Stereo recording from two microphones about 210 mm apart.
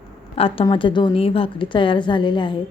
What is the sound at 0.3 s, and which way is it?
A woman's voice, 25° left (ahead or behind).